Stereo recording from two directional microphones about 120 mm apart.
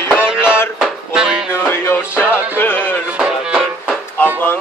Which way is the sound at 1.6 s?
20° left (ahead or behind).